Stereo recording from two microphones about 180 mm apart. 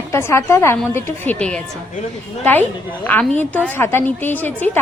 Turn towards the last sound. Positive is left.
turn(degrees=10)  # may be behind; listen again after turning